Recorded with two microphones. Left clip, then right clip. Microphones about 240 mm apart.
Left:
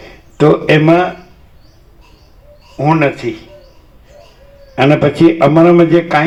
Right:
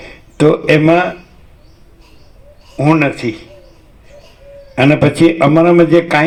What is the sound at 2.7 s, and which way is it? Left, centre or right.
Speech, right.